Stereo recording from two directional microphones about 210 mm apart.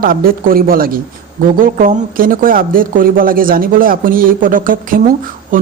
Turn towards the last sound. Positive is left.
turn(degrees=-40)  # may be behind; listen again after turning